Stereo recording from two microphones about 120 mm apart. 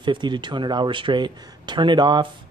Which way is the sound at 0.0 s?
40° right (ahead or behind).